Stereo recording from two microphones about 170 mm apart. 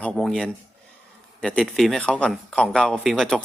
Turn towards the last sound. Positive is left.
turn(degrees=5)  # may be behind; listen again after turning